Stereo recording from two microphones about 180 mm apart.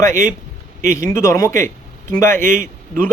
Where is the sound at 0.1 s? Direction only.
45° right (ahead or behind).